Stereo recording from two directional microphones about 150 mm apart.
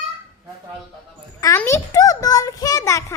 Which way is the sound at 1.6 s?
20° left (ahead or behind).